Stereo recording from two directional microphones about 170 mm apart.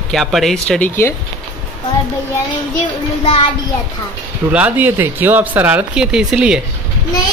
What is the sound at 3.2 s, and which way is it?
Speech, 35° left (ahead or behind).